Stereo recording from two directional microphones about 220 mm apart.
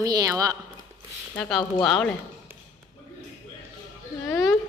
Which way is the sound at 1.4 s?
Centre (ahead or behind).